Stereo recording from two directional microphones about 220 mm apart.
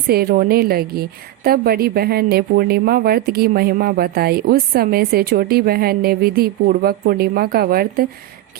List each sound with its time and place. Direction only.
0.1 s a woman's voice: 45° right (ahead or behind)